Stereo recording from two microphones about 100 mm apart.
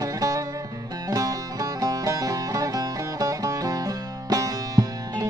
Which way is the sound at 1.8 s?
35° right (ahead or behind).